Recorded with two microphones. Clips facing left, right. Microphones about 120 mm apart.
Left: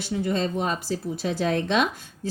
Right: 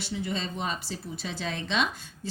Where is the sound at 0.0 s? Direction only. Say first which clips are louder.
Left 7 dB; 50° left (ahead or behind).